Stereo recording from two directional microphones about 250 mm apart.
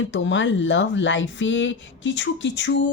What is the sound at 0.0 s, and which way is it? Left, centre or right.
Speech, left.